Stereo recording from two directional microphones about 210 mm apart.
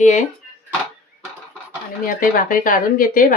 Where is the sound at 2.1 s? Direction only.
40° left (ahead or behind).